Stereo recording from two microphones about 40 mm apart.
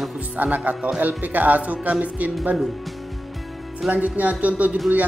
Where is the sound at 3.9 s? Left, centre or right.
Right.